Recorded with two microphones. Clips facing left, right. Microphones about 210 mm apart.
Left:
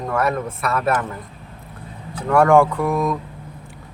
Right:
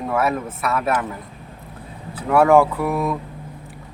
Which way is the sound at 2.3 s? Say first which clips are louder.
Even; 5° right (ahead or behind).